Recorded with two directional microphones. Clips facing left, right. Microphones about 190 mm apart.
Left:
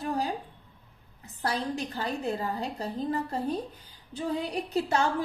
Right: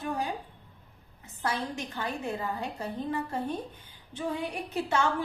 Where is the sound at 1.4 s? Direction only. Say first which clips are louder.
Left 2 dB; 35° left (ahead or behind).